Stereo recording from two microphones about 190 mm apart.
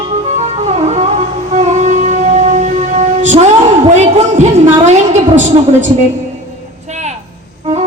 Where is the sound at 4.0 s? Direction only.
35° right (ahead or behind).